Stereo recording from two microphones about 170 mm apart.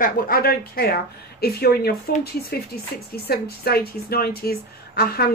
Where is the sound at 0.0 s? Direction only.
60° left (ahead or behind).